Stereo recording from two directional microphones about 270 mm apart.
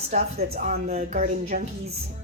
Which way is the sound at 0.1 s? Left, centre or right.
Right.